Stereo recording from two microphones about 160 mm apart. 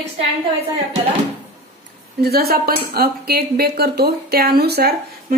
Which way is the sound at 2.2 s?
80° right.